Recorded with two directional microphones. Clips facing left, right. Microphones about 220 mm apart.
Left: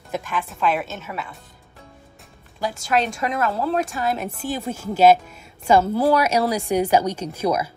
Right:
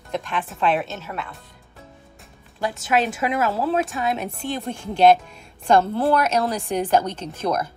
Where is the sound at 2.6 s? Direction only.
Centre (ahead or behind).